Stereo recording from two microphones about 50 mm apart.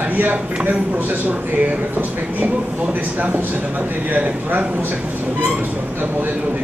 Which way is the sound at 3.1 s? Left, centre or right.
Right.